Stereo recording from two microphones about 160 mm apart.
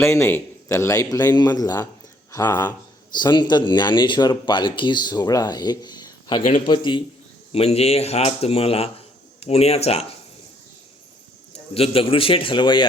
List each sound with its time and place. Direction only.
0.0 s speech: 15° left (ahead or behind); by 10.2 s 40° left (ahead or behind)
11.7 s speech: 35° left (ahead or behind)